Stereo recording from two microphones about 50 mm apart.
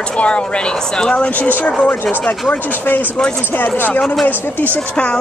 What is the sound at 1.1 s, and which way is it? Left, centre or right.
Speech, left.